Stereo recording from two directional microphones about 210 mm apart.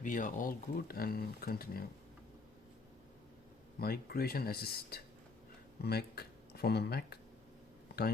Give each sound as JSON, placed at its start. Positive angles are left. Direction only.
{"t": 0.0, "sound": "speech", "side_deg": 40}
{"t": 3.8, "sound": "speech", "side_deg": 45}